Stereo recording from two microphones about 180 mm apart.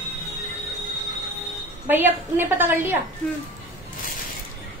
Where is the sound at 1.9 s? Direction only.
10° right (ahead or behind).